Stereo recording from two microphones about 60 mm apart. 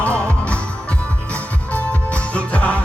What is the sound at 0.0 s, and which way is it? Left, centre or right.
Music, left.